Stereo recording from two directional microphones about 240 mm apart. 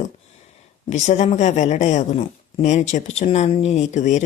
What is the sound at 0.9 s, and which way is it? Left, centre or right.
A woman's voice, left.